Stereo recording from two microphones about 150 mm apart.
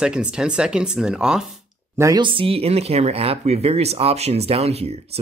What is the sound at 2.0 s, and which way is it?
Speech, 20° right (ahead or behind).